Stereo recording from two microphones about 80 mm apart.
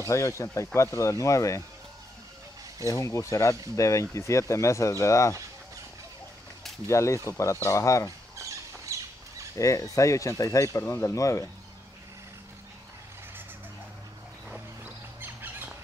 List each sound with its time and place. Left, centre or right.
0.0 s speech: left
2.9 s speech: left
6.9 s speech: left
8.8 s a sound: right
9.6 s speech: left
15.1 s bird: right